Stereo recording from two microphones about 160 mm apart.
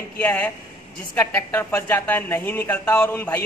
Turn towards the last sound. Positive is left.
turn(degrees=10)  # may be behind; listen again after turning